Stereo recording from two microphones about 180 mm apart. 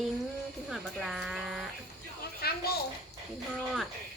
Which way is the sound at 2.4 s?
60° left (ahead or behind).